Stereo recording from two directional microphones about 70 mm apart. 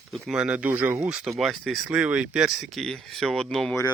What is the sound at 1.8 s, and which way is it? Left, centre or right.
Speech, centre.